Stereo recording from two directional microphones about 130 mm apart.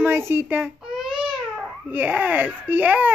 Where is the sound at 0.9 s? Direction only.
5° right (ahead or behind).